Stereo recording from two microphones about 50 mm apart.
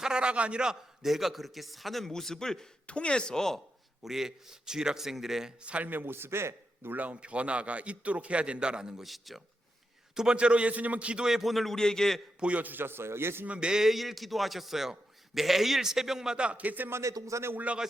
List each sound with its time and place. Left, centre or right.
0.0 s a man's voice: centre
1.0 s a man's voice: centre
2.8 s speech: left
4.0 s a man's voice: centre
5.6 s a man's voice: right
5.9 s a man's voice: right
6.9 s a man's voice: right; by 9.0 s centre
9.0 s a man's voice: centre
10.2 s a man's voice: centre
11.3 s a man's voice: centre
12.4 s a man's voice: right
12.8 s a man's voice: right
13.5 s a man's voice: centre; by 16.9 s right
16.9 s a man's voice: right